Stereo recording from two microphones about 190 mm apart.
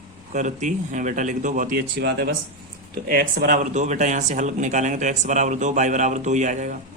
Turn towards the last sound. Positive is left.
turn(degrees=-40)  # may be behind; listen again after turning